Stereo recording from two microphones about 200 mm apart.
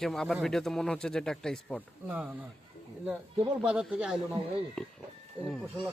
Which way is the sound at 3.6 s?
5° right (ahead or behind).